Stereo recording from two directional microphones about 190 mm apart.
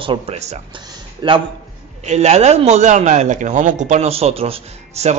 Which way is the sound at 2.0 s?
35° right (ahead or behind).